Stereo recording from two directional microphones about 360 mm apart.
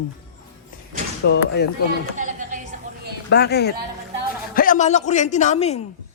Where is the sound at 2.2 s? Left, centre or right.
Right.